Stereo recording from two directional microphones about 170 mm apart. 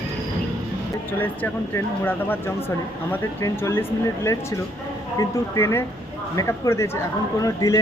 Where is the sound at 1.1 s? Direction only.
10° left (ahead or behind).